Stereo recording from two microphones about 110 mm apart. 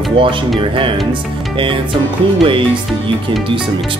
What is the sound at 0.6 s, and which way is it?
Speech, 50° right (ahead or behind).